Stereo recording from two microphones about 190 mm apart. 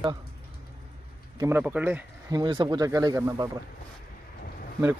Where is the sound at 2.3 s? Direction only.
20° right (ahead or behind).